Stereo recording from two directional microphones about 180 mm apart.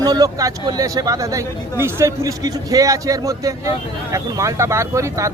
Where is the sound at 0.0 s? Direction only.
20° right (ahead or behind).